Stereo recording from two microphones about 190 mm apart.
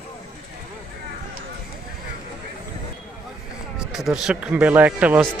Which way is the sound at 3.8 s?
Centre (ahead or behind).